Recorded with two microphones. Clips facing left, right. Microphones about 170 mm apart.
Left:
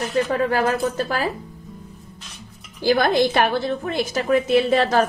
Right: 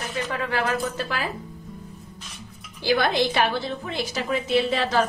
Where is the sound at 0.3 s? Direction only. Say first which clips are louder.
Left 2 dB; 40° left (ahead or behind).